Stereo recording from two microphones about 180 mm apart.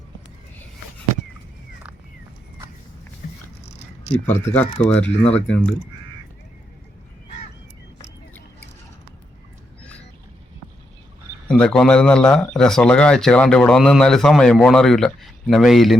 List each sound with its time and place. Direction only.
3.6 s a sound: 40° left (ahead or behind)
4.8 s speech: 10° left (ahead or behind)
11.4 s speech: 5° left (ahead or behind)